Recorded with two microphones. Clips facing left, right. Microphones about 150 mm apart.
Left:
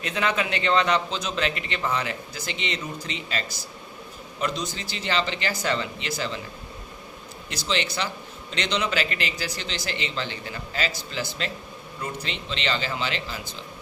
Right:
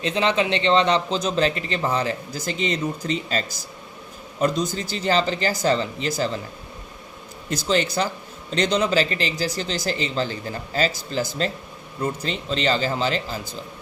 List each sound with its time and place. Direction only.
0.0 s a man's voice: 30° right (ahead or behind)
7.5 s a man's voice: 45° right (ahead or behind)